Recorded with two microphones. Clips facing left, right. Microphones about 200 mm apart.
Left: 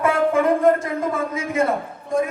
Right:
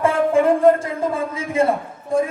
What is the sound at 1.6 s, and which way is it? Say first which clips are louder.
Speech: right 3 dB; 30° right (ahead or behind).